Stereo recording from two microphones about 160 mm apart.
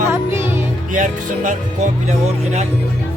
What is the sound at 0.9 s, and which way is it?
Speech, 55° right (ahead or behind).